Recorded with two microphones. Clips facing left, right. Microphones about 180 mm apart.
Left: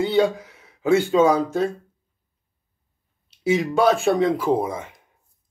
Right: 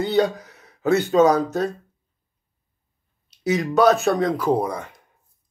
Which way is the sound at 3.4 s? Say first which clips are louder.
Right 1 dB; 25° left (ahead or behind).